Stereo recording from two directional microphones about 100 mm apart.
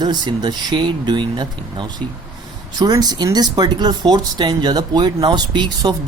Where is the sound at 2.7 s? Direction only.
40° right (ahead or behind).